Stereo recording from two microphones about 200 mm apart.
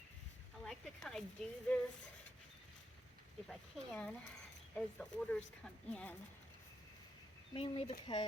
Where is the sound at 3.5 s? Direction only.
5° left (ahead or behind).